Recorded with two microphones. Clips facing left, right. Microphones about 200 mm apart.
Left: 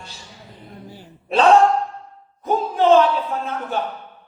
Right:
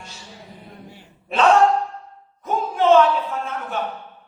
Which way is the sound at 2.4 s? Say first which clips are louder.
Left 2 dB; 35° left (ahead or behind).